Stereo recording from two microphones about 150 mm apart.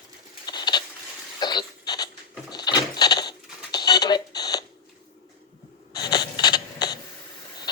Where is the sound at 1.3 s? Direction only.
30° left (ahead or behind).